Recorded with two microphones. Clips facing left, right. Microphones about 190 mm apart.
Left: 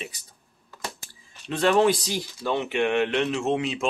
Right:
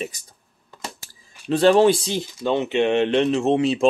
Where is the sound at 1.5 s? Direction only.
30° right (ahead or behind).